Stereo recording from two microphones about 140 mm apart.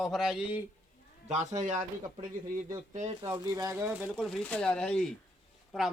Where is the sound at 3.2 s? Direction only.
30° right (ahead or behind).